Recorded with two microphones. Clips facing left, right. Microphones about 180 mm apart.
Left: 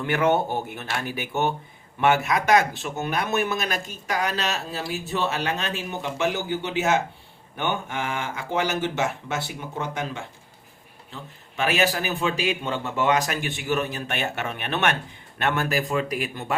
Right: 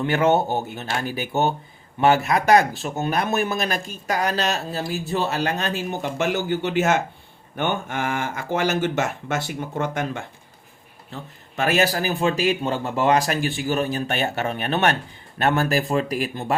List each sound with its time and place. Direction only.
0.0 s speech: 30° right (ahead or behind)